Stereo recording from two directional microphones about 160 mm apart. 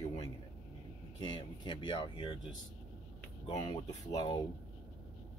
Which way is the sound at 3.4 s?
25° left (ahead or behind).